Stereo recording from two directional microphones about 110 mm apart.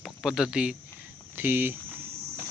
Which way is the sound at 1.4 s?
20° right (ahead or behind).